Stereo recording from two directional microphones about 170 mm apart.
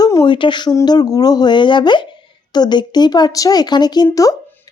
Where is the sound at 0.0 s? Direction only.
20° left (ahead or behind).